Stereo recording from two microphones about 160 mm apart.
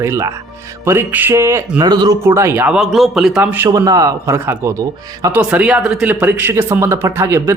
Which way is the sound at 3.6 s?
25° right (ahead or behind).